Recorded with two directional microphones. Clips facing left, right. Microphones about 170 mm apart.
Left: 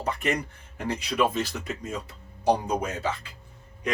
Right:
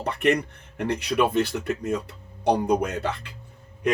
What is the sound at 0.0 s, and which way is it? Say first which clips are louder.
Speech: right 5 dB; 65° right (ahead or behind).